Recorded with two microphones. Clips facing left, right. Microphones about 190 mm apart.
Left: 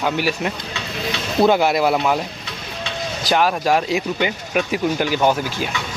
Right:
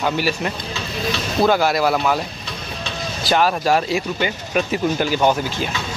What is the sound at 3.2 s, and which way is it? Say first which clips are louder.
Speech: even; 15° left (ahead or behind).